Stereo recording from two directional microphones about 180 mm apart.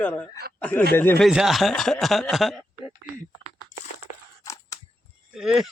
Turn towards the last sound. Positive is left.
turn(degrees=0)  # may be behind; listen again after turning